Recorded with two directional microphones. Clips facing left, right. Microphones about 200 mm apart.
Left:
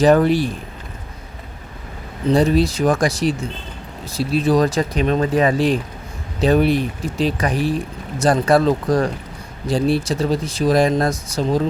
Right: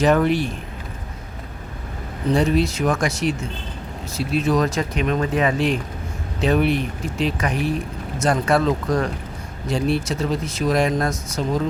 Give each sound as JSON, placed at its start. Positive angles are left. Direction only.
{"t": 0.0, "sound": "speech", "side_deg": 35}
{"t": 2.3, "sound": "speech", "side_deg": 35}